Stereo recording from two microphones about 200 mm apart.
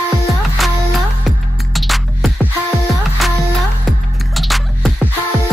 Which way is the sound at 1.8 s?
Centre (ahead or behind).